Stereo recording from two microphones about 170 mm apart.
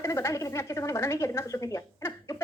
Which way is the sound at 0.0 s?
20° left (ahead or behind).